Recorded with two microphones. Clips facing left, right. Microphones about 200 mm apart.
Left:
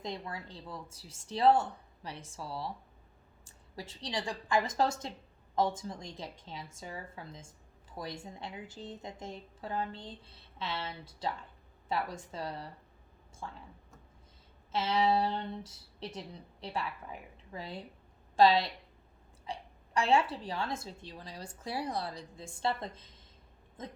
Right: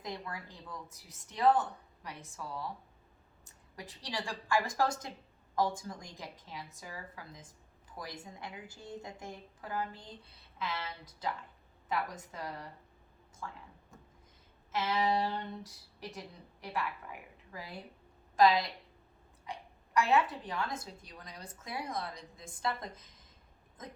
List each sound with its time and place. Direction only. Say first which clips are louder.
0.0 s a woman's voice: left 2 dB; 25° left (ahead or behind)
15.3 s a woman's voice: left 2 dB; 25° left (ahead or behind)